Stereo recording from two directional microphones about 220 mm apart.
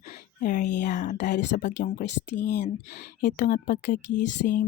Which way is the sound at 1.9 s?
50° left (ahead or behind).